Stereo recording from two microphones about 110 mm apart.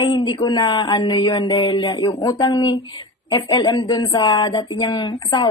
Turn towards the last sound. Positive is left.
turn(degrees=45)  # may be behind; listen again after turning